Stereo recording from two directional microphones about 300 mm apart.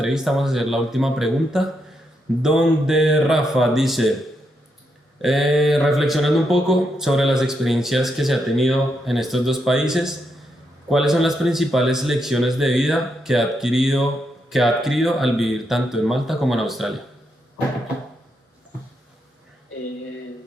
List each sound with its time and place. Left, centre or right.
0.0 s speech: centre
5.2 s speech: centre